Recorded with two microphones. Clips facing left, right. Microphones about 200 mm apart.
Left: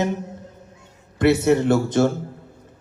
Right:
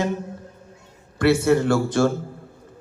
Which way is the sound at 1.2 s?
20° left (ahead or behind).